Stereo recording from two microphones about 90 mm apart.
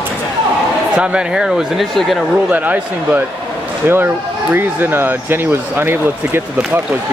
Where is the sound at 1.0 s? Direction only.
10° right (ahead or behind).